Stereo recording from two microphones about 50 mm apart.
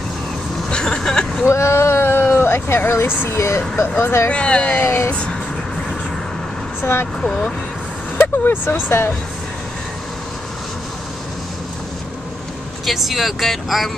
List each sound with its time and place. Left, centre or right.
0.7 s vehicle: centre
1.4 s a sound: left
3.3 s speech: left
4.3 s speech: left
4.7 s speech: left
7.2 s speech: centre
8.2 s speech: left
12.8 s speech: centre